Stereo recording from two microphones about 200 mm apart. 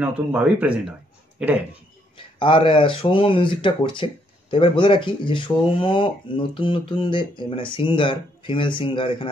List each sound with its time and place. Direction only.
0.0 s speech: 5° right (ahead or behind)
2.1 s speech: 25° left (ahead or behind)